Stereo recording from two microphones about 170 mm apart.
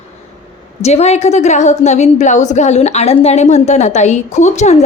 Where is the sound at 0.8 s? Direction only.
40° left (ahead or behind).